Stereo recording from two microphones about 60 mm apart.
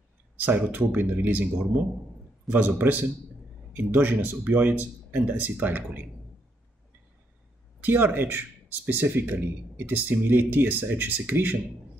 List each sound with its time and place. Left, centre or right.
0.4 s speech: right
2.5 s speech: right
7.8 s speech: right